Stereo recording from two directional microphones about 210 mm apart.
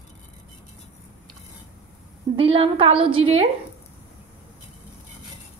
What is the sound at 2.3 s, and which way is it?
A woman's voice, 30° right (ahead or behind).